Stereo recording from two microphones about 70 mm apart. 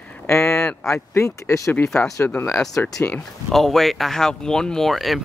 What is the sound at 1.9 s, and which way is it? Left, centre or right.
A man's voice, centre.